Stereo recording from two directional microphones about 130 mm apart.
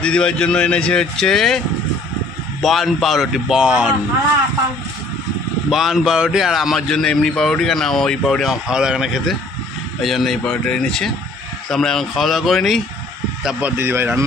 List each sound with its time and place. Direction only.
0.0 s speech: 5° left (ahead or behind)
2.6 s a man's voice: centre (ahead or behind)
5.7 s a man's voice: 5° right (ahead or behind)